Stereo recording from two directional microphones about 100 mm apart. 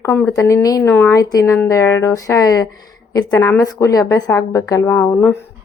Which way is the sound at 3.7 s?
35° left (ahead or behind).